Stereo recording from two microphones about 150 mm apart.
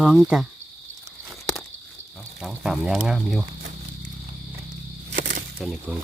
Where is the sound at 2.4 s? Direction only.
Centre (ahead or behind).